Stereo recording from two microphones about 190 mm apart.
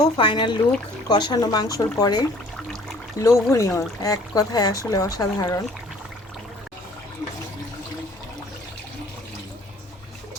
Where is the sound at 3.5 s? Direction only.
15° left (ahead or behind).